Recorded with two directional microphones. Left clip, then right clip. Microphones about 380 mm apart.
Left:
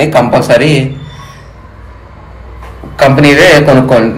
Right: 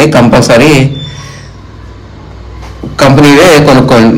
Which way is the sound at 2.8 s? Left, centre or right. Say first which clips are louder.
Right 9 dB; right.